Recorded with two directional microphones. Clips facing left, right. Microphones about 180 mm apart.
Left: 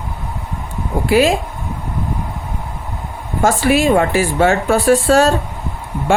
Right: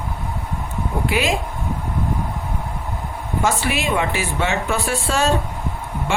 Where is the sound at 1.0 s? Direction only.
35° left (ahead or behind).